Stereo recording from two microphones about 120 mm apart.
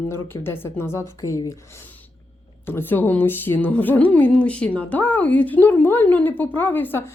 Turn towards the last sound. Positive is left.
turn(degrees=15)  # may be behind; listen again after turning